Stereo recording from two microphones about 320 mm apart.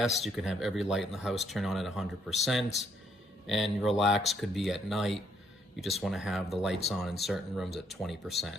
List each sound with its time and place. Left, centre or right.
0.0 s speech: centre